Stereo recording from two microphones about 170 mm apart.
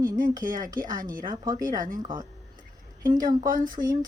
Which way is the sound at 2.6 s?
50° right (ahead or behind).